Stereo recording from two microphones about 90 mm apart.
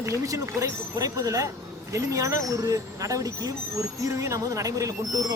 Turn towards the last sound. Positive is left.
turn(degrees=-40)  # may be behind; listen again after turning